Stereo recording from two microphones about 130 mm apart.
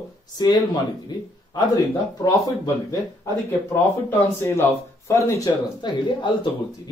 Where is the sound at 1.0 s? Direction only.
35° left (ahead or behind).